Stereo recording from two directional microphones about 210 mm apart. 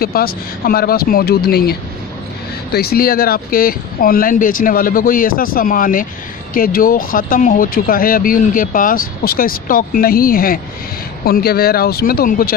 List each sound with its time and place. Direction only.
0.0 s speech: 45° left (ahead or behind)